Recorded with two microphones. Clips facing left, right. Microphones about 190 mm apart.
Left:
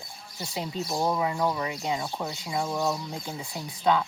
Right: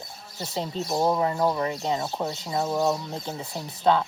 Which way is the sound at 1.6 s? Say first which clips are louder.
Right 3 dB; 35° right (ahead or behind).